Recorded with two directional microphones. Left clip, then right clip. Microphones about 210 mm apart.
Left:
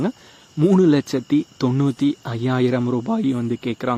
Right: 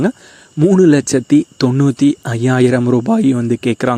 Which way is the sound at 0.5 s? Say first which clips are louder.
Right 6 dB; 25° right (ahead or behind).